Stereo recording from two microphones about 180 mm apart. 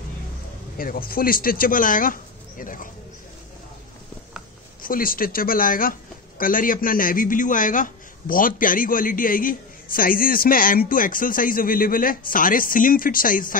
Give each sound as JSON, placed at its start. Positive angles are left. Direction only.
{"t": 0.7, "sound": "speech", "side_deg": 50}
{"t": 4.8, "sound": "speech", "side_deg": 50}